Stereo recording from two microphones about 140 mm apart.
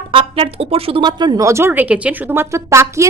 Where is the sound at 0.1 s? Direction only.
40° right (ahead or behind).